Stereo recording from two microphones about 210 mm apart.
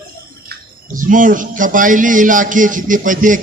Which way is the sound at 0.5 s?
40° right (ahead or behind).